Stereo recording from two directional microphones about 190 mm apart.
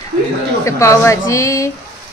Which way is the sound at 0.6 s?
15° left (ahead or behind).